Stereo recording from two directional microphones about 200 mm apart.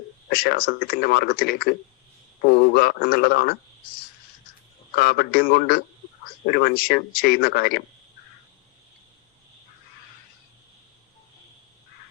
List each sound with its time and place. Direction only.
0.3 s a man's voice: 50° left (ahead or behind)